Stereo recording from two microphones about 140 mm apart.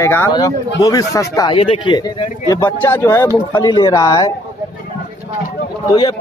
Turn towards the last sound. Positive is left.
turn(degrees=30)  # may be behind; listen again after turning